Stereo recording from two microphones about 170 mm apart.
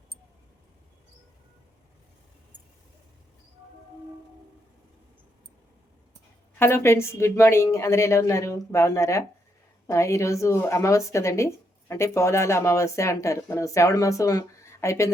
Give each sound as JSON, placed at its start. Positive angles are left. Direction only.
{"t": 6.6, "sound": "speech", "side_deg": 15}